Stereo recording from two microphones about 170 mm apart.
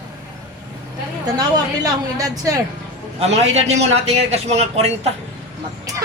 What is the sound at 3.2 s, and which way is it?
Speech, 40° right (ahead or behind).